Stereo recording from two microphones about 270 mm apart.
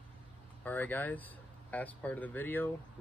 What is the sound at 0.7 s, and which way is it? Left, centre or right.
Speech, centre.